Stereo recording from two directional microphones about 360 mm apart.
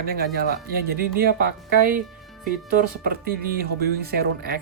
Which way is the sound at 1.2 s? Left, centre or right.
Right.